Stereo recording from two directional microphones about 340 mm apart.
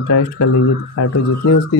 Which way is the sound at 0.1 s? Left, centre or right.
Left.